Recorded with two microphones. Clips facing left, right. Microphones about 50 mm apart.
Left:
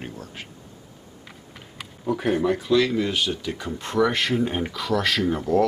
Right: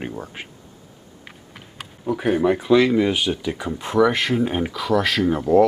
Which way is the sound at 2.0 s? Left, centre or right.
Centre.